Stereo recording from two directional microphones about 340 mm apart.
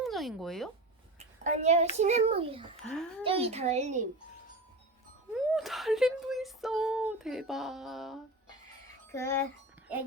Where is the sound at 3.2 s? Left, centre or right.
Centre.